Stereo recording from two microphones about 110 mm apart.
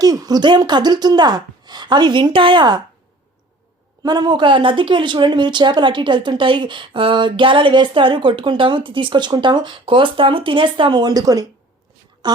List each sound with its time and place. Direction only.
0.0 s speech: 35° right (ahead or behind)
4.0 s a woman's voice: 40° right (ahead or behind)